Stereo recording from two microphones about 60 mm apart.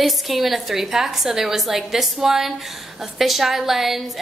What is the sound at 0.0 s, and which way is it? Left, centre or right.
A woman's voice, centre.